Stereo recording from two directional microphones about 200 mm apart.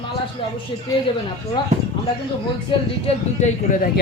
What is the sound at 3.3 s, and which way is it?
Speech, 40° left (ahead or behind).